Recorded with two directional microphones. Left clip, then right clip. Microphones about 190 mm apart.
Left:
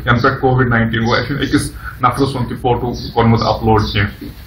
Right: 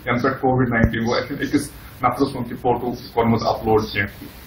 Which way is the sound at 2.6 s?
15° right (ahead or behind).